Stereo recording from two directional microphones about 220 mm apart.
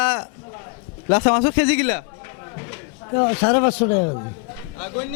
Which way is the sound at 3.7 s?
30° left (ahead or behind).